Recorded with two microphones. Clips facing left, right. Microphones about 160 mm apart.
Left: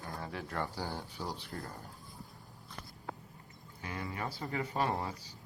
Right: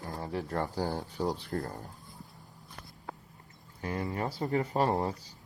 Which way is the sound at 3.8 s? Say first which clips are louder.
Right 7 dB; 40° right (ahead or behind).